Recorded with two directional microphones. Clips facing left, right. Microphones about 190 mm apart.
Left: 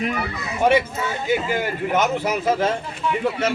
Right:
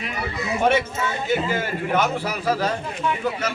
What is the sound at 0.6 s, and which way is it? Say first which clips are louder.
A man's voice: left 3 dB; 10° left (ahead or behind).